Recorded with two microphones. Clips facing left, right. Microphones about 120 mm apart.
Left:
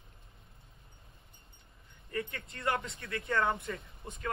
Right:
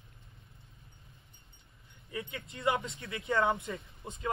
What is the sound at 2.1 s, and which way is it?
Speech, 10° right (ahead or behind).